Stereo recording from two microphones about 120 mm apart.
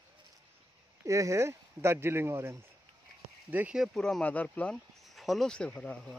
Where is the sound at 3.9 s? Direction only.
5° left (ahead or behind).